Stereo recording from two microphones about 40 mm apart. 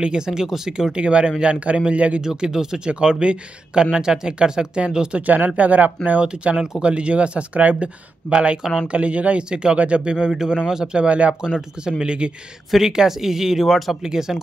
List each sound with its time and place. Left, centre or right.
0.0 s speech: centre
2.2 s speech: centre
5.2 s speech: right
6.2 s speech: right
9.4 s speech: right
10.1 s speech: centre
11.0 s speech: right
11.4 s speech: centre
12.7 s speech: centre